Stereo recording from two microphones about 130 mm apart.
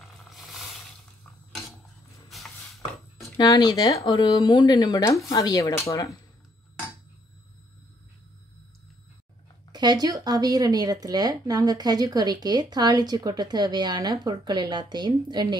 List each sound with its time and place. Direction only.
0.0 s roar: centre (ahead or behind)
2.2 s a sound: centre (ahead or behind)
3.3 s speech: 35° left (ahead or behind)
9.7 s speech: 35° right (ahead or behind)